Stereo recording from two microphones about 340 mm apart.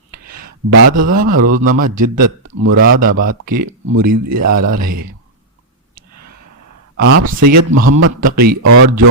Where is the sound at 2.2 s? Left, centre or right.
Right.